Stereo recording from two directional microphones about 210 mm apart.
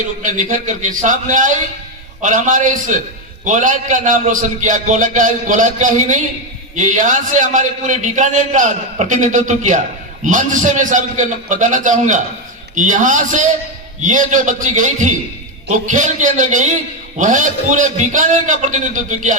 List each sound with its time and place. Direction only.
0.2 s a man's voice: 35° right (ahead or behind)